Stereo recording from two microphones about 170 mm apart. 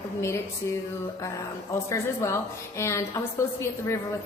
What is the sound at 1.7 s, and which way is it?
A woman's voice, 15° left (ahead or behind).